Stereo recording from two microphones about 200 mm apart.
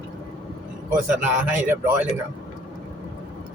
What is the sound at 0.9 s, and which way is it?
A man's voice, 10° right (ahead or behind).